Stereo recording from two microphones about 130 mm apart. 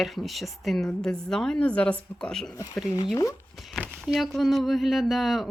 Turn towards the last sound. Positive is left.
turn(degrees=0)  # may be behind; listen again after turning